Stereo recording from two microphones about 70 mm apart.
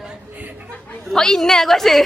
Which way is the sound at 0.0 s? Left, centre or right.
Centre.